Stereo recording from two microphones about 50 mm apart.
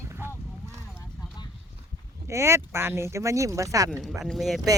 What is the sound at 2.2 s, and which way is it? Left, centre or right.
Speech, right.